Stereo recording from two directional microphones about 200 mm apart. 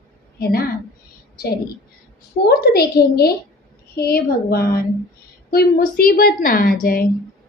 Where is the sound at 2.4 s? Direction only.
55° left (ahead or behind).